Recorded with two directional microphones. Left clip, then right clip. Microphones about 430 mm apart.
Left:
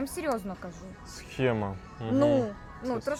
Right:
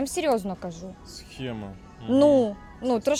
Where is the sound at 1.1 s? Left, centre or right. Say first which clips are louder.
Left 8 dB; left.